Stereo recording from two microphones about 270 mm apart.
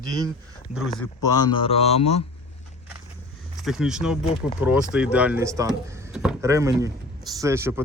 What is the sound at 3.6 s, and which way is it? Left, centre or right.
Speech, centre.